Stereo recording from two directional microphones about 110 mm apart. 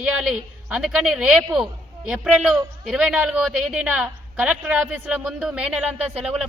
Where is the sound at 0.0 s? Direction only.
10° right (ahead or behind).